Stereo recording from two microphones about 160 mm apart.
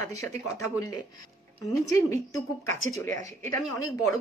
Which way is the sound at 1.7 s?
20° left (ahead or behind).